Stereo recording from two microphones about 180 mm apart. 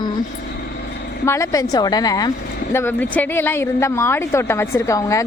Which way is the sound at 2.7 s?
10° left (ahead or behind).